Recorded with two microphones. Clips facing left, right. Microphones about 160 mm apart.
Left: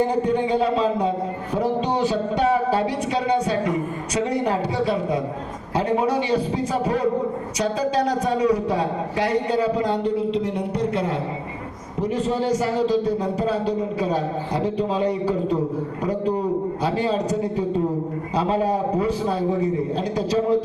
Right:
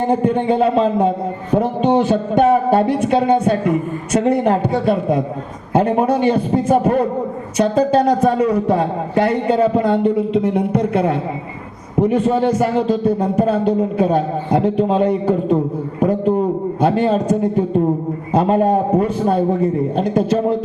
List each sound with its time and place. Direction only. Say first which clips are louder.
0.1 s a man's voice: right 5 dB; 55° right (ahead or behind)